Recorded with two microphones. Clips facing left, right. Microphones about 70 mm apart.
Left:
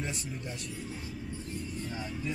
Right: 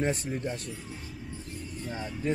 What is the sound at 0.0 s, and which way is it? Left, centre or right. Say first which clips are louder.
Speech: right 8 dB; right.